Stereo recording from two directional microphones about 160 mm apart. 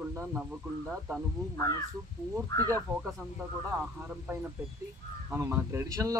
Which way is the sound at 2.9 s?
20° right (ahead or behind).